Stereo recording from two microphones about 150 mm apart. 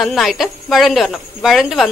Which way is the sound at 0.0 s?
Centre (ahead or behind).